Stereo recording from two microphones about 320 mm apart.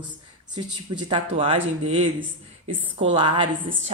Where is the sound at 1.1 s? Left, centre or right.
Centre.